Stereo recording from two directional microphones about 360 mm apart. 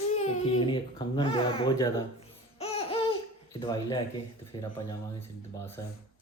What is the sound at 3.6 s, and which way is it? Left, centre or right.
Speech, centre.